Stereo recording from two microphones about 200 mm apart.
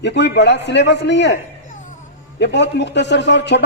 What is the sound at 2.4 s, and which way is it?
A man's voice, 60° left (ahead or behind).